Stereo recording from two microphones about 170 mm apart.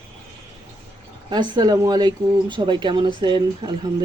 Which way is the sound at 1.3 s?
25° right (ahead or behind).